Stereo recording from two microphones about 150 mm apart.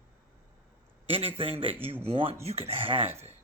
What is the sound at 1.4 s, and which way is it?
Speech, 40° right (ahead or behind).